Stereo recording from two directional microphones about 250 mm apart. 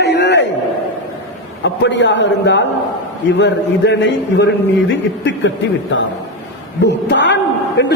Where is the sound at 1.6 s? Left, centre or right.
Left.